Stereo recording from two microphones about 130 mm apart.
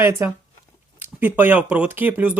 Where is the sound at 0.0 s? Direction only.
20° right (ahead or behind).